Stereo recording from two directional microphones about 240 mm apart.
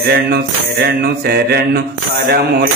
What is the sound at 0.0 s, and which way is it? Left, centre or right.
Mantra, right.